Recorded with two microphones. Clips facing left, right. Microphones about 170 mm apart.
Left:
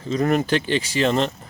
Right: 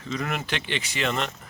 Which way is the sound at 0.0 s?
35° left (ahead or behind).